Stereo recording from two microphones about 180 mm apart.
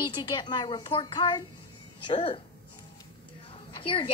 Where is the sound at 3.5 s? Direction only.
30° left (ahead or behind).